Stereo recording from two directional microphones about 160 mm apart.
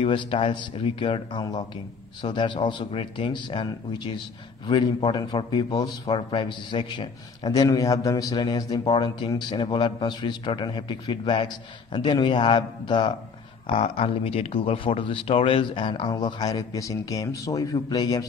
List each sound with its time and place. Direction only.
0.0 s a man's voice: 35° left (ahead or behind)